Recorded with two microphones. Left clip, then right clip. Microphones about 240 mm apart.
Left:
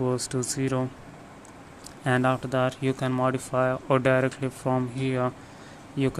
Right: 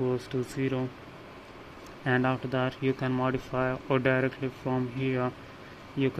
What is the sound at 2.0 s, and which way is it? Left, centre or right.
Speech, centre.